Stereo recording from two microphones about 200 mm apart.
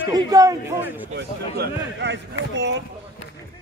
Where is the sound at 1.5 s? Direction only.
60° right (ahead or behind).